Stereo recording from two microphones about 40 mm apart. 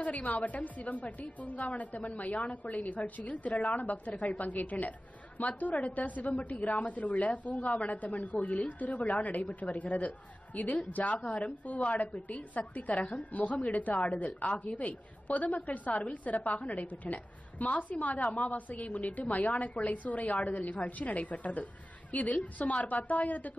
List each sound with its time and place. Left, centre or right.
0.0 s a woman's voice: left